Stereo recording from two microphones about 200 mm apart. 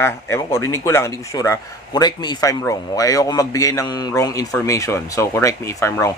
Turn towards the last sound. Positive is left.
turn(degrees=15)  # may be behind; listen again after turning